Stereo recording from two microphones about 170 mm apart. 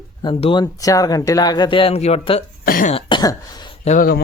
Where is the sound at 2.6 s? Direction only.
55° left (ahead or behind).